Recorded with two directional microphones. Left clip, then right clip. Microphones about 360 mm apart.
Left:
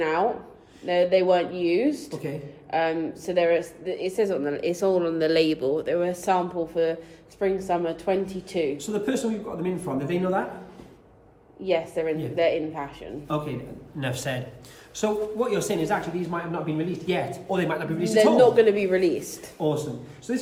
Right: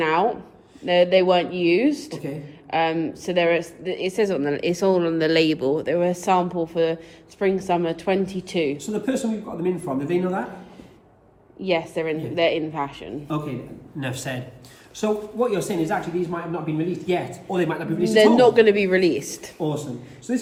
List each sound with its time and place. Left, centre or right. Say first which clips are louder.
0.0 s a woman's voice: right 3 dB; right
8.8 s speech: right 1 dB; centre
11.6 s a woman's voice: right 2 dB; right
13.2 s speech: left 1 dB; centre
18.3 s a woman's voice: right 2 dB; right
19.5 s speech: left 1 dB; centre